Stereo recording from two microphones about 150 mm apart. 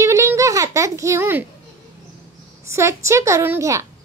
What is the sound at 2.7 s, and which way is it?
A woman's voice, 20° right (ahead or behind).